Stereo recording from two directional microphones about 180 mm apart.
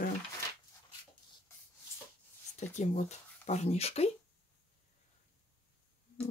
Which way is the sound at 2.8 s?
40° left (ahead or behind).